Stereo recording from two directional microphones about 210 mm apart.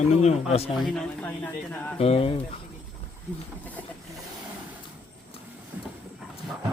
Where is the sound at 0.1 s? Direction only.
30° left (ahead or behind).